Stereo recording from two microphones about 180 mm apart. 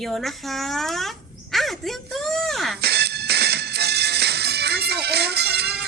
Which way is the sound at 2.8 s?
65° right (ahead or behind).